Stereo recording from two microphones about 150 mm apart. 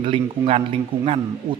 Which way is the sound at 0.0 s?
40° right (ahead or behind).